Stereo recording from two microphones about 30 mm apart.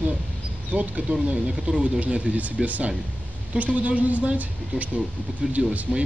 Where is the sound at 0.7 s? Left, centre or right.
Right.